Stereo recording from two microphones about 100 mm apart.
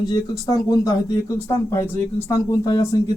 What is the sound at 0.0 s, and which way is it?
Speech, 40° left (ahead or behind).